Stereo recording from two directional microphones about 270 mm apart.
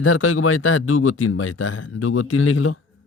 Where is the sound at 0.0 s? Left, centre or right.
Left.